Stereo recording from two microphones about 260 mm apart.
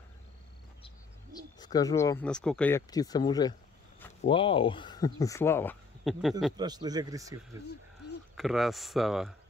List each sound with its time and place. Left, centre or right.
0.8 s speech: centre
6.5 s a man's voice: centre
8.4 s speech: centre